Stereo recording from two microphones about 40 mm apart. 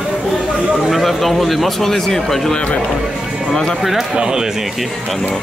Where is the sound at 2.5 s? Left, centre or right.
Left.